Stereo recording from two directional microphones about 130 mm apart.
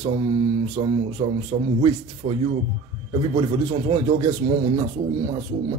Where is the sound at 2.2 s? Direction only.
65° right (ahead or behind).